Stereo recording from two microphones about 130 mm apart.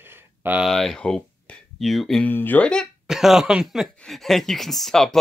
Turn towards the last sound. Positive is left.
turn(degrees=5)  # may be behind; listen again after turning